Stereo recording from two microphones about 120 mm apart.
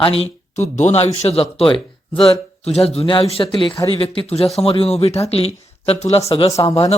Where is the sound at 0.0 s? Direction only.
55° left (ahead or behind).